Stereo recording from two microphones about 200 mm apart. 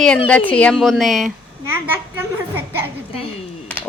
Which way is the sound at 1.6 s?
10° right (ahead or behind).